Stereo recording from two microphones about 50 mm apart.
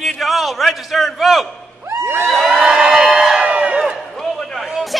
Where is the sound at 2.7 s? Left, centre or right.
Centre.